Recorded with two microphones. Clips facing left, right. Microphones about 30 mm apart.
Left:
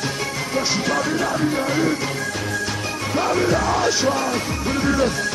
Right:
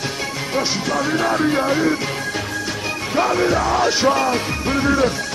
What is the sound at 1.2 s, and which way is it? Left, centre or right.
Music, right.